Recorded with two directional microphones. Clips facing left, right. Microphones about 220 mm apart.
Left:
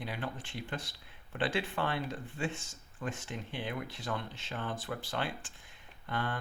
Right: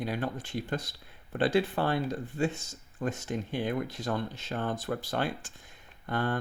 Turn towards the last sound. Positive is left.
turn(degrees=-45)  # may be behind; listen again after turning